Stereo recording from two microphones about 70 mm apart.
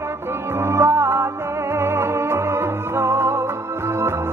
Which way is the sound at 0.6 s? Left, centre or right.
Right.